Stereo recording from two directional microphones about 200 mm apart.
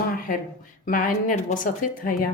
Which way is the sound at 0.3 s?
40° left (ahead or behind).